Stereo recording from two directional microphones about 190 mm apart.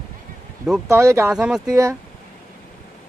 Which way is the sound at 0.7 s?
5° right (ahead or behind).